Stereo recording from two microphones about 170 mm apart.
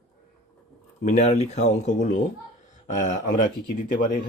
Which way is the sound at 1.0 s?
40° left (ahead or behind).